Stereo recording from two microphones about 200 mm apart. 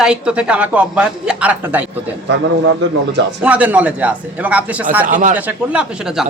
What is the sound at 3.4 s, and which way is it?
Speech, 5° right (ahead or behind).